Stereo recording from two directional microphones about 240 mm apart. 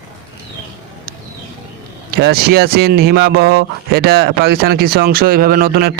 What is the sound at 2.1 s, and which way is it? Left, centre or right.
Speech, right.